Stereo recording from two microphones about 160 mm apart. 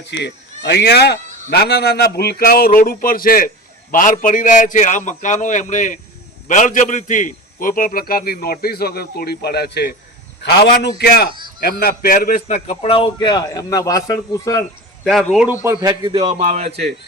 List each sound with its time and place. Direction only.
0.2 s a man's voice: 90° left
11.6 s a man's voice: 70° left (ahead or behind); by 14.6 s 20° left (ahead or behind)
15.0 s speech: centre (ahead or behind)
15.6 s a man's voice: 20° right (ahead or behind)
16.1 s a man's voice: 45° right (ahead or behind)